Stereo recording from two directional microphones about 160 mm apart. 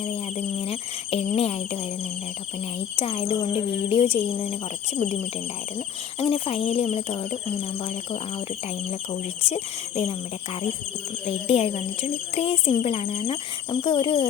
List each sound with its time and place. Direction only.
0.0 s speech: 40° left (ahead or behind)
2.9 s speech: 40° left (ahead or behind)
6.1 s speech: 35° left (ahead or behind)
9.5 s speech: 40° left (ahead or behind)
11.3 s speech: 40° left (ahead or behind)